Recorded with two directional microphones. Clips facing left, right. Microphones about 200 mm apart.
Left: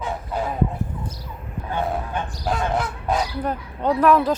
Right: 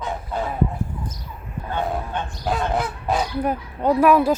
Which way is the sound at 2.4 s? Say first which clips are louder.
Right 1 dB; centre (ahead or behind).